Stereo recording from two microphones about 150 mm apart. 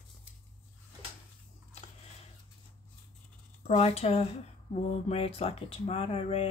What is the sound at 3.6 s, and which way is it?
Speech, 45° left (ahead or behind).